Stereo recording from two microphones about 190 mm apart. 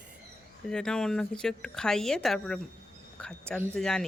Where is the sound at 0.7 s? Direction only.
5° left (ahead or behind).